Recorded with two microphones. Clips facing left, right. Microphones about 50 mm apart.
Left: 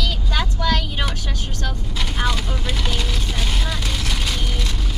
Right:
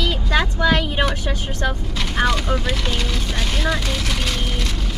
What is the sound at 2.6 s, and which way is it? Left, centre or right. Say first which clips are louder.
Vehicle: right 2 dB; centre.